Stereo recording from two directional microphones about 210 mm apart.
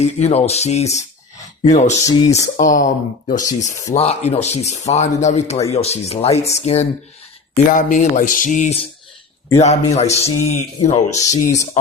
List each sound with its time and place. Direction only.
0.0 s speech: 30° left (ahead or behind)
2.0 s speech: 15° left (ahead or behind)
2.6 s speech: 40° left (ahead or behind)
9.9 s speech: 30° left (ahead or behind)
11.1 s speech: 15° left (ahead or behind)
11.5 s speech: 35° left (ahead or behind)